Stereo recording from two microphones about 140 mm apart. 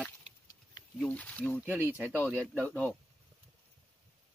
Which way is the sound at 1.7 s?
15° right (ahead or behind).